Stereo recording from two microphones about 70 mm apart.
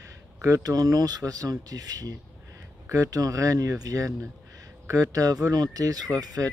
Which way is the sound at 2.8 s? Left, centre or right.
Right.